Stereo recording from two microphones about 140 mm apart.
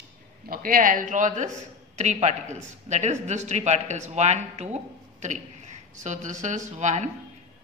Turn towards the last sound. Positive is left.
turn(degrees=-60)  # may be behind; listen again after turning